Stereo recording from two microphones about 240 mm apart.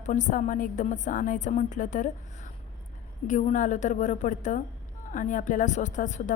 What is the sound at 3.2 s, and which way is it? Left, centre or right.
A woman's voice, left.